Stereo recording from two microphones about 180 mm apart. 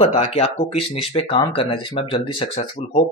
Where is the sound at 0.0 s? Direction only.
35° left (ahead or behind).